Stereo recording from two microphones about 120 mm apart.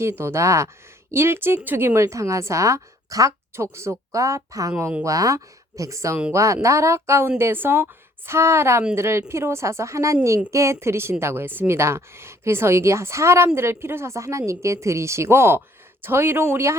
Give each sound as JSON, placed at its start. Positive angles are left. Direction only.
{"t": 0.0, "sound": "a woman's voice", "side_deg": -20}
{"t": 4.8, "sound": "speech", "side_deg": -15}
{"t": 5.0, "sound": "a woman's voice", "side_deg": -30}